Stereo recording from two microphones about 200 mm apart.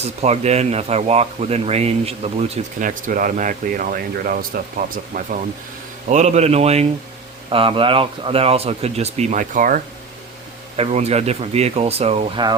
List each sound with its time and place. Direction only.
0.0 s speech: 35° right (ahead or behind)
2.7 s speech: 40° right (ahead or behind)
6.1 s speech: 35° right (ahead or behind)
10.8 s speech: 30° right (ahead or behind)